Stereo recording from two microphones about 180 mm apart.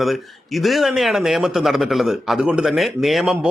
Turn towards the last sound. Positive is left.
turn(degrees=0)  # may be behind; listen again after turning